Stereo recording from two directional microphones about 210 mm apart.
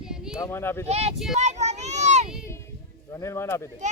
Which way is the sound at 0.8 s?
30° right (ahead or behind).